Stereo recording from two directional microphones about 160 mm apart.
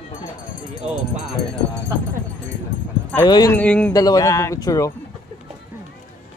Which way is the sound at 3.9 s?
20° left (ahead or behind).